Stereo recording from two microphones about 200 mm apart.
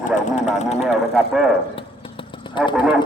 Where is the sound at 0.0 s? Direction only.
40° left (ahead or behind).